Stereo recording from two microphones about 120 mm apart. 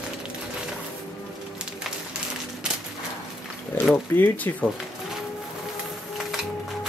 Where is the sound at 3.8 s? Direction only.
15° left (ahead or behind).